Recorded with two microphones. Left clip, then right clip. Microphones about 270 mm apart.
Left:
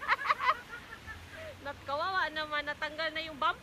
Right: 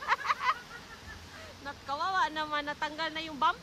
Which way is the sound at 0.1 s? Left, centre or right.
Centre.